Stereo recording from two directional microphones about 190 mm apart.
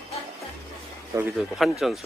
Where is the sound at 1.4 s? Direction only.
Centre (ahead or behind).